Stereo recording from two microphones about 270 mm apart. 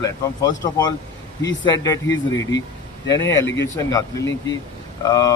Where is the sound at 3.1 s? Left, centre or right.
Centre.